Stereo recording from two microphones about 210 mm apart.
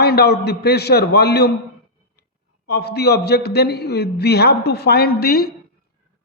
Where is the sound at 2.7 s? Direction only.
50° left (ahead or behind).